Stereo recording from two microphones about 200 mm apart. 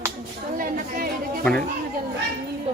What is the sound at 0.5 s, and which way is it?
Chatter, 45° right (ahead or behind).